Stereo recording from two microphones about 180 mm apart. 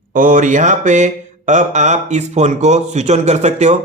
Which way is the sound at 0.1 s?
45° right (ahead or behind).